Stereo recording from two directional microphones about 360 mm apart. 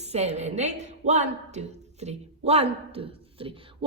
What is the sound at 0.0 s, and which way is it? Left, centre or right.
A woman's voice, centre.